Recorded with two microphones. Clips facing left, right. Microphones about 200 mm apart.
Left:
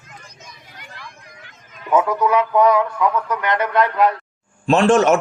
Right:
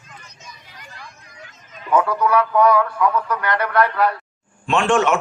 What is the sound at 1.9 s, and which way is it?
Speech, 20° left (ahead or behind).